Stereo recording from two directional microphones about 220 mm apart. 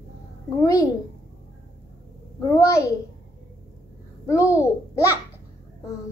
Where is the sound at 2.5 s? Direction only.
15° left (ahead or behind).